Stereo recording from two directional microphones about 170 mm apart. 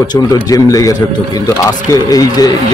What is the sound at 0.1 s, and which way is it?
A man's voice, 20° left (ahead or behind).